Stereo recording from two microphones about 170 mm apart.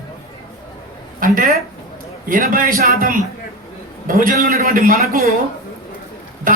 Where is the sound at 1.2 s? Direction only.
60° right (ahead or behind).